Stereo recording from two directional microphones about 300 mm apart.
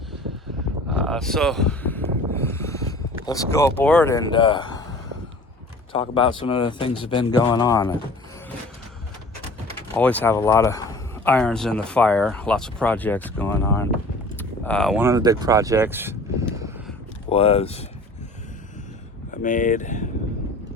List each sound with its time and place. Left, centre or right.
0.9 s a sound: centre
3.2 s speech: centre
9.9 s speech: centre
14.3 s a sound: centre
17.2 s speech: centre
19.3 s speech: left